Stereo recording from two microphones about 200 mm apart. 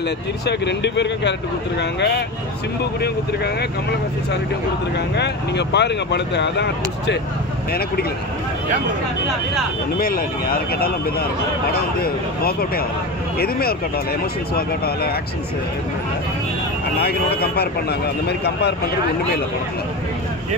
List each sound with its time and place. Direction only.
0.5 s speech: 60° left (ahead or behind)
5.1 s speech: 60° left (ahead or behind)
9.9 s speech: 45° left (ahead or behind)
17.0 s speech: 50° left (ahead or behind)